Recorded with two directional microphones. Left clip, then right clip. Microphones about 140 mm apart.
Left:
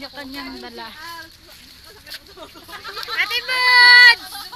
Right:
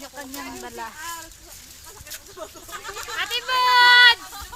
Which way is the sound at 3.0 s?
Centre (ahead or behind).